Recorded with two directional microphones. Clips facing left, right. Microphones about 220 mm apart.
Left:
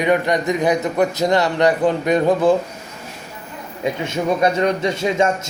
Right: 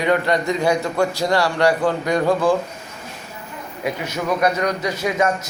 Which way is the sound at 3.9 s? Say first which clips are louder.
Left 3 dB; 25° left (ahead or behind).